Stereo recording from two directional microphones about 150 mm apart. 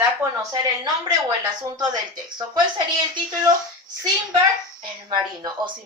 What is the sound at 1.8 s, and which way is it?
Speech, 30° right (ahead or behind).